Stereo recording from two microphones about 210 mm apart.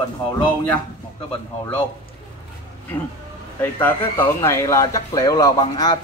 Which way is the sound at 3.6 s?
10° left (ahead or behind).